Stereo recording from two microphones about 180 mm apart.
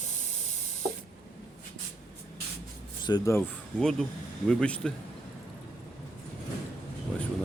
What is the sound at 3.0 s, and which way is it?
Speech, 20° left (ahead or behind).